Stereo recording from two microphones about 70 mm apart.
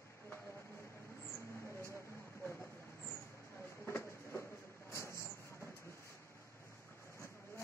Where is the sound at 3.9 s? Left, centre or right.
Left.